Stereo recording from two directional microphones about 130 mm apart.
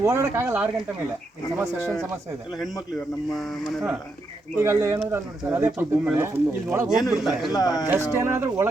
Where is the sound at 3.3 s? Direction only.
Centre (ahead or behind).